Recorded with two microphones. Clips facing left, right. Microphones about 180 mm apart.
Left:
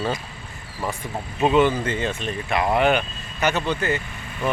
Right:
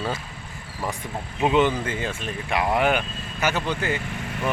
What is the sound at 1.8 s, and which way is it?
Speech, 10° right (ahead or behind).